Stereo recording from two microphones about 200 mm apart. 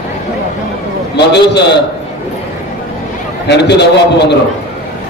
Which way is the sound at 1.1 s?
60° left (ahead or behind).